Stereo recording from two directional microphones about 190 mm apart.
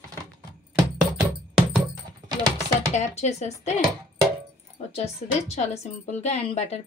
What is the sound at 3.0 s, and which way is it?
Speech, 35° left (ahead or behind).